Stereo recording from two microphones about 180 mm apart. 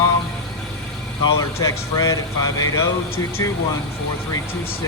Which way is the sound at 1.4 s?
20° left (ahead or behind).